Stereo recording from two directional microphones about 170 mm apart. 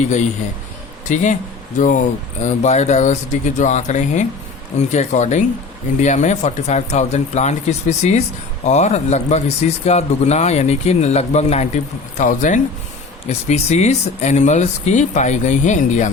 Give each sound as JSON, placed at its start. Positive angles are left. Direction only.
{"t": 0.0, "sound": "speech", "side_deg": 45}